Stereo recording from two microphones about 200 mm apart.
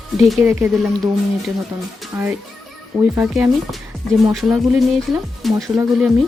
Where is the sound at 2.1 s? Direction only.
10° right (ahead or behind).